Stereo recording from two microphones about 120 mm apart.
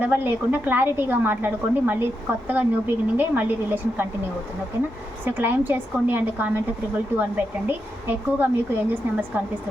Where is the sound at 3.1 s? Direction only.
15° right (ahead or behind).